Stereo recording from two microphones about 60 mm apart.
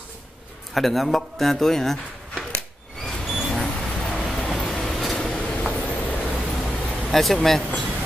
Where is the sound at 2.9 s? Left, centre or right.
Centre.